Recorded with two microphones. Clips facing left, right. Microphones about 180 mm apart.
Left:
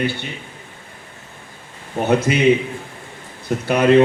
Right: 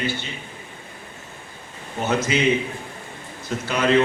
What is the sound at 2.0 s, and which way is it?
Speech, 60° left (ahead or behind).